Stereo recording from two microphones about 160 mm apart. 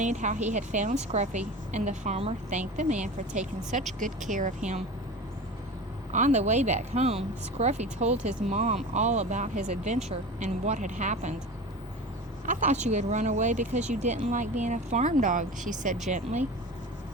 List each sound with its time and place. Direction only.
0.0 s a woman's voice: 50° right (ahead or behind)
6.1 s a woman's voice: 50° right (ahead or behind)
12.5 s a woman's voice: 50° right (ahead or behind)